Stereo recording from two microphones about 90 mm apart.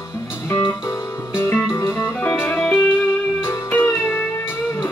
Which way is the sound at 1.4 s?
25° left (ahead or behind).